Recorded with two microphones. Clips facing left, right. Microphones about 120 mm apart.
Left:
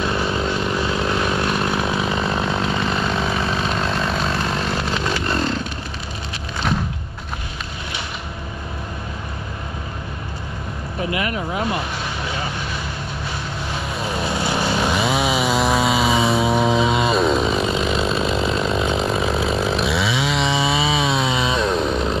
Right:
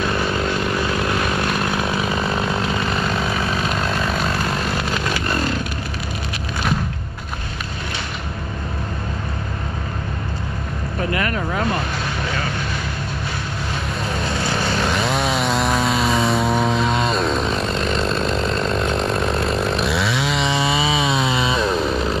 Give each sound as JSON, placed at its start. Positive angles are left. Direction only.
{"t": 0.0, "sound": "vehicle", "side_deg": 15}
{"t": 1.5, "sound": "chainsaw", "side_deg": 0}
{"t": 6.6, "sound": "a sound", "side_deg": 0}
{"t": 14.2, "sound": "vehicle", "side_deg": 15}
{"t": 14.9, "sound": "chainsaw", "side_deg": 5}